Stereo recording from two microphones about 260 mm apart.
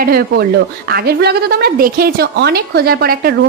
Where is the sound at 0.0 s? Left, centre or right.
Right.